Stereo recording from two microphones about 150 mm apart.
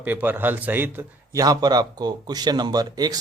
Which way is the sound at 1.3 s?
25° right (ahead or behind).